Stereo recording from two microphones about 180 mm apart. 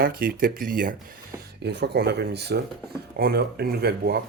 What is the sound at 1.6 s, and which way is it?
Speech, 70° right (ahead or behind).